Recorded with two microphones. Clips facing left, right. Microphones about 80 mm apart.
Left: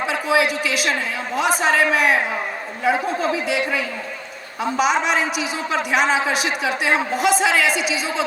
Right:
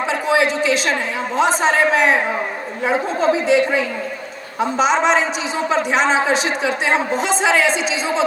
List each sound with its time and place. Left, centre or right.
0.3 s a woman's voice: right